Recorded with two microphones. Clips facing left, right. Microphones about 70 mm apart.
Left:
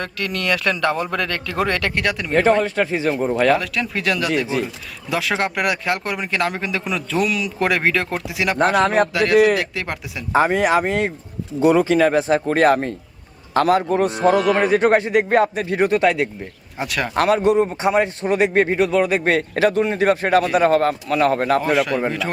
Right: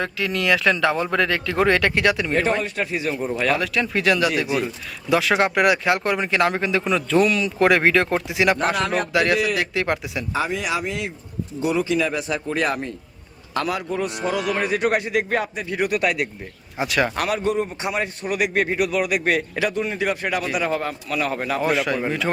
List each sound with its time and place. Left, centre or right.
0.0 s speech: centre
2.6 s a man's voice: left
3.3 s speech: left
3.6 s speech: centre
10.3 s a man's voice: left
16.7 s speech: centre
17.2 s a man's voice: left
21.6 s speech: centre